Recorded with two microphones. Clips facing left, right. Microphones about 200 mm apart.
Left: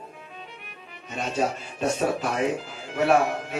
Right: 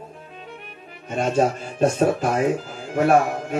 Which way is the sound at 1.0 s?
50° right (ahead or behind).